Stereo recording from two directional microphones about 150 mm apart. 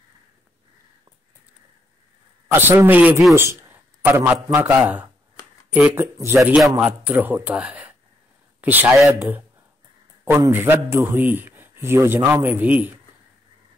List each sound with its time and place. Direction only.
2.4 s a man's voice: 15° right (ahead or behind)